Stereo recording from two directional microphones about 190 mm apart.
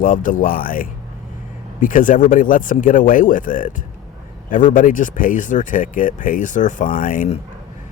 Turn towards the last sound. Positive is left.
turn(degrees=40)  # may be behind; listen again after turning